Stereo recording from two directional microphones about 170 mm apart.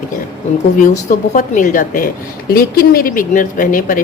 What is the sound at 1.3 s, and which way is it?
Speech, 45° left (ahead or behind).